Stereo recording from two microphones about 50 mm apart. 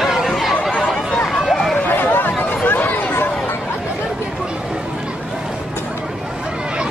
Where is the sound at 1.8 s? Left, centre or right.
Left.